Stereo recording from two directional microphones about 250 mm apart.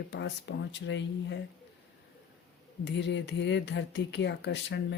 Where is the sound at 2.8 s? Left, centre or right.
Left.